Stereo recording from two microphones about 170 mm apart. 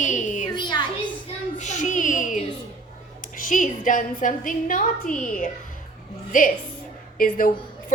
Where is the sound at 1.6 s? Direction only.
45° left (ahead or behind).